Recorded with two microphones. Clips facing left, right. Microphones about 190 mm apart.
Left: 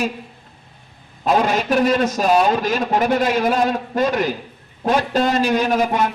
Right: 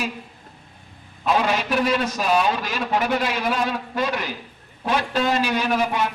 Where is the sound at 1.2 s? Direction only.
45° left (ahead or behind).